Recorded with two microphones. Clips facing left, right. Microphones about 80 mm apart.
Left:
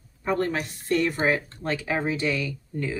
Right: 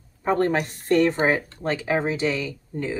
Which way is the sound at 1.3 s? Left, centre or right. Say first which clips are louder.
Right 2 dB; right.